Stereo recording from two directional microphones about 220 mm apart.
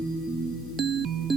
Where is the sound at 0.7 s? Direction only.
Centre (ahead or behind).